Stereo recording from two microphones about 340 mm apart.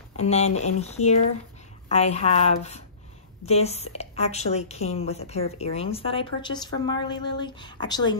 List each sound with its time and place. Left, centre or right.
0.2 s a woman's voice: centre